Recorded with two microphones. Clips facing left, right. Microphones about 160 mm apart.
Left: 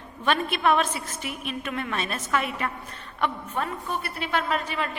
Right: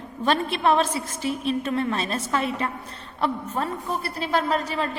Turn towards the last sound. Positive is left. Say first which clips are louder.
# right 3 dB
turn(degrees=-35)  # may be behind; listen again after turning